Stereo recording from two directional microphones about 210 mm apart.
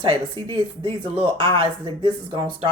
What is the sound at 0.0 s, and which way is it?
Speech, 25° right (ahead or behind).